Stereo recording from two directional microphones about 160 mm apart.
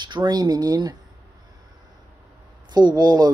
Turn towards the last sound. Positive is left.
turn(degrees=-25)  # may be behind; listen again after turning